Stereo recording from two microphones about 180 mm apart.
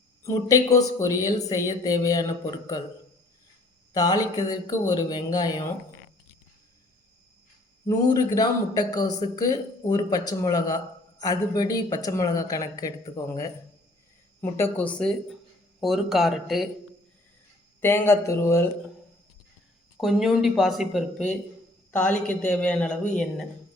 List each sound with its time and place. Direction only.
0.2 s a man's voice: 15° left (ahead or behind)
3.9 s a man's voice: 20° left (ahead or behind)
7.9 s a man's voice: 20° left (ahead or behind)
14.5 s speech: 10° left (ahead or behind)
17.7 s speech: 10° left (ahead or behind)
20.0 s speech: centre (ahead or behind)